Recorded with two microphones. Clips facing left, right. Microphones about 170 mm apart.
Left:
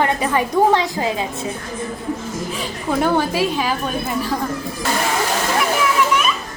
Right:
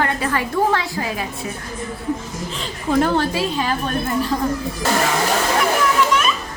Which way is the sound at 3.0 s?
5° left (ahead or behind).